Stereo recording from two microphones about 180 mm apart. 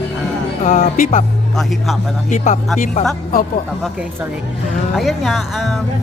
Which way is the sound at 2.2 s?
45° left (ahead or behind).